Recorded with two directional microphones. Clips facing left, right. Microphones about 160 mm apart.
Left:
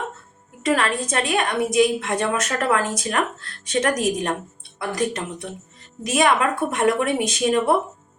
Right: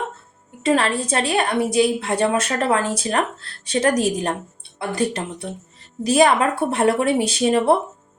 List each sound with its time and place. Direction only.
0.6 s a woman's voice: 30° right (ahead or behind)